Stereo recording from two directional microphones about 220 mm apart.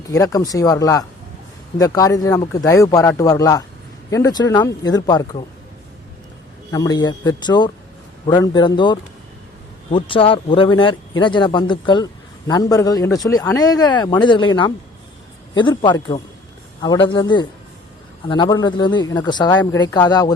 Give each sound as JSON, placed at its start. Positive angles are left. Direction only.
{"t": 0.1, "sound": "speech", "side_deg": 15}
{"t": 6.7, "sound": "speech", "side_deg": 15}